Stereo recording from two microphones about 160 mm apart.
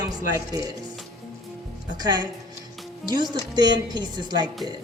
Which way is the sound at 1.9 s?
25° right (ahead or behind).